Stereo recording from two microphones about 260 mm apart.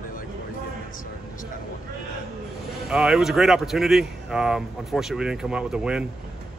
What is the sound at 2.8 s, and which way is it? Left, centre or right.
Speech, centre.